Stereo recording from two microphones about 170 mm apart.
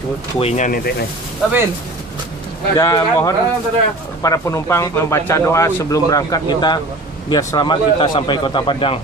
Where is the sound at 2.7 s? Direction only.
20° left (ahead or behind).